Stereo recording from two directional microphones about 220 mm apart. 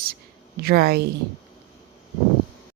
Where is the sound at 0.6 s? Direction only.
45° right (ahead or behind).